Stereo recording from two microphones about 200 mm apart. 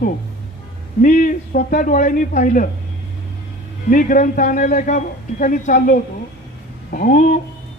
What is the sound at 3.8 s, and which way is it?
A woman's voice, 40° left (ahead or behind).